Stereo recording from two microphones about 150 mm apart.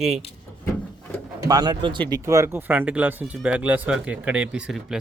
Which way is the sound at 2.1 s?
20° right (ahead or behind).